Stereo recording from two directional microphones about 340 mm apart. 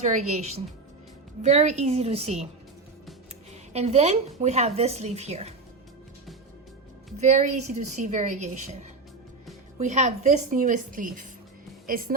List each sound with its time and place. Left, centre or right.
0.0 s a woman's voice: centre
3.7 s a woman's voice: centre
7.2 s a woman's voice: right
9.7 s a woman's voice: right